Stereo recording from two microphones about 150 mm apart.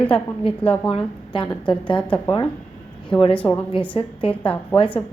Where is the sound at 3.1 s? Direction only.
30° left (ahead or behind).